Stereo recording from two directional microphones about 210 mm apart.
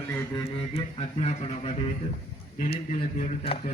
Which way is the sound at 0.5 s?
30° left (ahead or behind).